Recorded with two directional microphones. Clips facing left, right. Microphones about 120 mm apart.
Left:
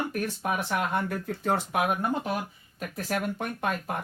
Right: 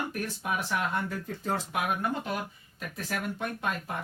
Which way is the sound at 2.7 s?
50° left (ahead or behind).